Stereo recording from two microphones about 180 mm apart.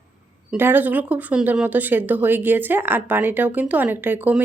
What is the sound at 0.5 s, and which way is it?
Speech, 10° right (ahead or behind).